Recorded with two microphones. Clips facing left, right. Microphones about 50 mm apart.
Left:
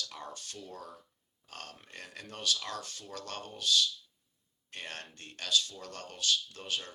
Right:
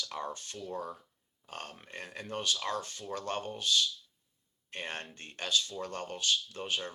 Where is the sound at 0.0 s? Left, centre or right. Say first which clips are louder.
Right 5 dB; right.